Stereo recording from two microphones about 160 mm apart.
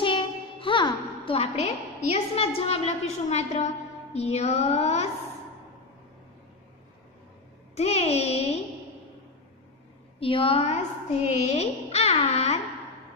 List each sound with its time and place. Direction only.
0.0 s music: 30° left (ahead or behind)
2.0 s a child's voice: 40° left (ahead or behind)
4.1 s a sound: 40° left (ahead or behind)
7.7 s a child's voice: 40° left (ahead or behind)
10.2 s a child's voice: 35° left (ahead or behind)